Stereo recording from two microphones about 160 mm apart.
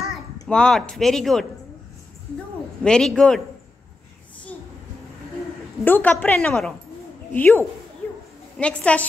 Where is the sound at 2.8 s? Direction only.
5° left (ahead or behind).